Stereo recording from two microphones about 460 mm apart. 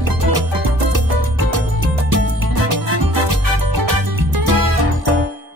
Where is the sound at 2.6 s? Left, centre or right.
Right.